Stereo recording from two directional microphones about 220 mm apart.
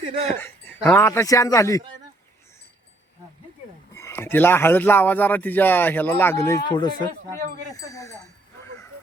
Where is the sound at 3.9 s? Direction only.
10° left (ahead or behind).